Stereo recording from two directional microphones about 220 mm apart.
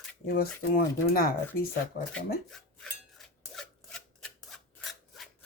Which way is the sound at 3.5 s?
5° left (ahead or behind).